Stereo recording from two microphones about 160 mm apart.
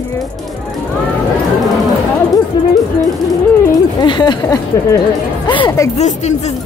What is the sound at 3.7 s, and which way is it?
Speech, 25° left (ahead or behind).